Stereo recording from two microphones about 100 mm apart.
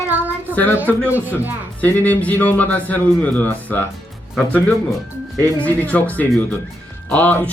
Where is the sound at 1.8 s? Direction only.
15° left (ahead or behind).